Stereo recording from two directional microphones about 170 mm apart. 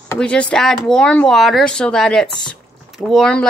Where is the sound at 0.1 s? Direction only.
5° left (ahead or behind).